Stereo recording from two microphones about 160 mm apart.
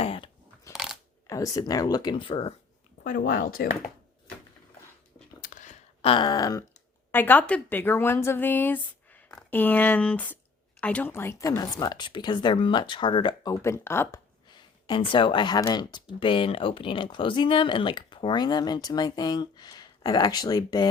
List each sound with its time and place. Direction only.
0.0 s crunch: 35° left (ahead or behind)
0.7 s coin: centre (ahead or behind)
1.3 s speech: 20° left (ahead or behind)
3.0 s speech: 60° left (ahead or behind)
5.4 s a sound: 55° left (ahead or behind)
6.0 s speech: 30° left (ahead or behind)
7.1 s a woman's voice: 10° left (ahead or behind)
14.5 s speech: 30° left (ahead or behind)